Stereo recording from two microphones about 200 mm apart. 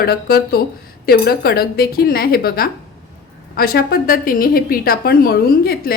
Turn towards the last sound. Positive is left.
turn(degrees=50)  # may be behind; listen again after turning